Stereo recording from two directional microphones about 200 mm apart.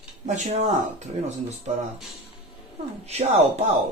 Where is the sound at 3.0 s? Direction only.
35° right (ahead or behind).